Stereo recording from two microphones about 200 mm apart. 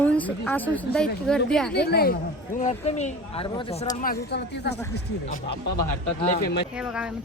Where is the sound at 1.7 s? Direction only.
55° left (ahead or behind).